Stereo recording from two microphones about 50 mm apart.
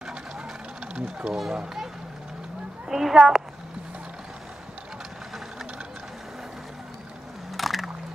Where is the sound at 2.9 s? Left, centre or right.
Centre.